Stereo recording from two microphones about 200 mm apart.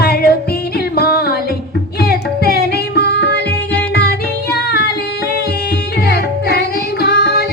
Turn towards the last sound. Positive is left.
turn(degrees=50)  # may be behind; listen again after turning